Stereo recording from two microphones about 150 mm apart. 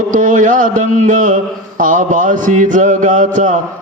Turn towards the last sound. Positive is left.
turn(degrees=-60)  # may be behind; listen again after turning